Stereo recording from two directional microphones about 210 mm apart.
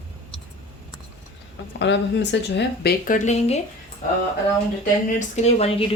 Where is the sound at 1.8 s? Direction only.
55° left (ahead or behind).